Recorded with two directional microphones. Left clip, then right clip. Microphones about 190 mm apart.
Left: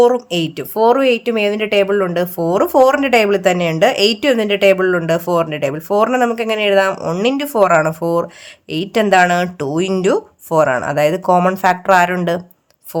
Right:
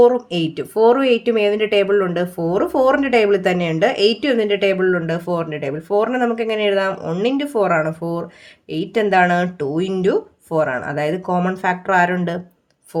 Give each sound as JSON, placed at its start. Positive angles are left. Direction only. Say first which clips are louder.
{"t": 0.0, "sound": "speech", "louder": "left 1 dB", "side_deg": 25}